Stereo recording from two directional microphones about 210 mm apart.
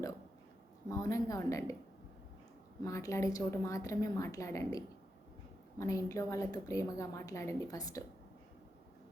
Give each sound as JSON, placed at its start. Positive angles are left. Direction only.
{"t": 0.9, "sound": "a woman's voice", "side_deg": 15}
{"t": 2.8, "sound": "a woman's voice", "side_deg": 15}
{"t": 5.8, "sound": "a woman's voice", "side_deg": 15}